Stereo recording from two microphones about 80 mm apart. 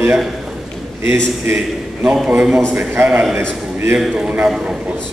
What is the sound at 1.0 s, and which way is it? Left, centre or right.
Speech, right.